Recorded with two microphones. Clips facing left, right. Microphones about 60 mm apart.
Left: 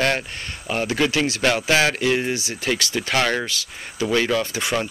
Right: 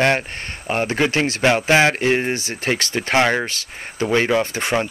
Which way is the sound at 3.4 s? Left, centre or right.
Right.